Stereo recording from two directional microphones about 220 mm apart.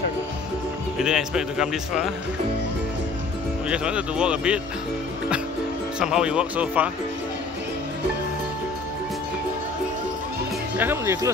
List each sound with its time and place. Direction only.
0.9 s speech: 5° right (ahead or behind)
3.6 s speech: 5° right (ahead or behind)
5.9 s speech: 5° right (ahead or behind)
10.8 s speech: 10° right (ahead or behind)